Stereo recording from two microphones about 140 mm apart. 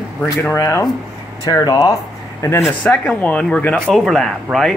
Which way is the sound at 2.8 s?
10° left (ahead or behind).